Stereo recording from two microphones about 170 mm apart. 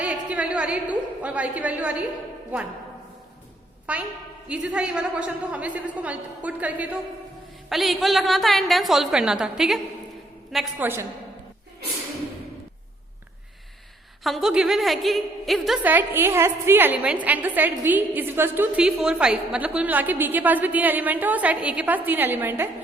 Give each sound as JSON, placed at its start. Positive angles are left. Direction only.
{"t": 0.0, "sound": "a woman's voice", "side_deg": -10}
{"t": 3.9, "sound": "a woman's voice", "side_deg": -10}
{"t": 14.3, "sound": "a woman's voice", "side_deg": 0}